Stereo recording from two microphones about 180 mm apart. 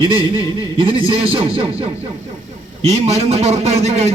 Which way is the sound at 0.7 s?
30° right (ahead or behind).